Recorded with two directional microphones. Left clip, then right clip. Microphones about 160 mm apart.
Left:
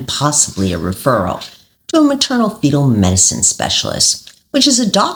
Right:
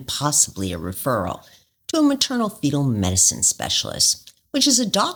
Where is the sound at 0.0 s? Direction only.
45° right (ahead or behind).